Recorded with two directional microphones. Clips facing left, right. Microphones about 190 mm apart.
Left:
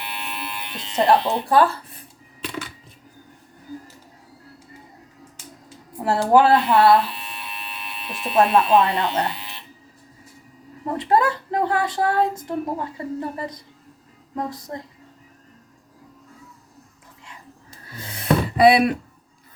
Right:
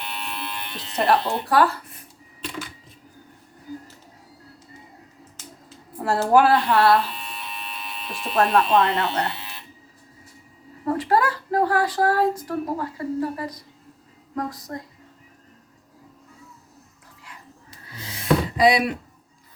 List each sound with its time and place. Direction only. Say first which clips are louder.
0.0 s electric shaver: even; 5° left (ahead or behind)
1.2 s speech: left 2 dB; 20° left (ahead or behind)
6.1 s speech: left 2 dB; 20° left (ahead or behind)
6.7 s speech: left 3 dB; 5° left (ahead or behind)
10.8 s speech: left 1 dB; 20° left (ahead or behind)
17.8 s music: even; 50° left (ahead or behind)